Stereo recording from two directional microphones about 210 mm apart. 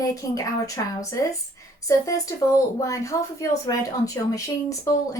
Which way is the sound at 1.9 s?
15° left (ahead or behind).